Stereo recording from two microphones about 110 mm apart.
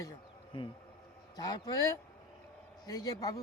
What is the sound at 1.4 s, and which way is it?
A man's voice, 40° left (ahead or behind).